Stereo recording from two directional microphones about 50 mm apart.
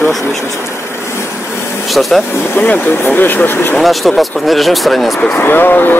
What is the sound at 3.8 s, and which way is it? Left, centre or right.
Speech, centre.